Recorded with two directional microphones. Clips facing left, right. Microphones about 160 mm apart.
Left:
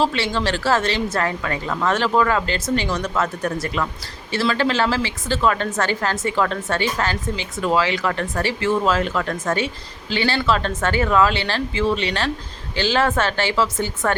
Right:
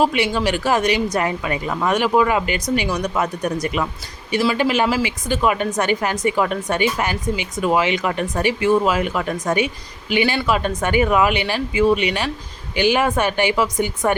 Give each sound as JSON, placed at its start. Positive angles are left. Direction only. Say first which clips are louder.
{"t": 0.0, "sound": "speech", "louder": "right 3 dB", "side_deg": -15}